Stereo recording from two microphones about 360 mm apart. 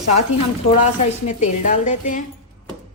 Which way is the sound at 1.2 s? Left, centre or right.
Centre.